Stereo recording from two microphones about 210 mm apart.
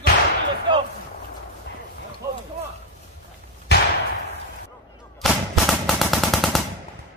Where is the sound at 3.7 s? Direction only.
50° left (ahead or behind).